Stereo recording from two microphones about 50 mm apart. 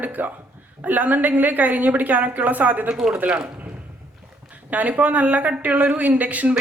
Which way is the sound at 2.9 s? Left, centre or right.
Centre.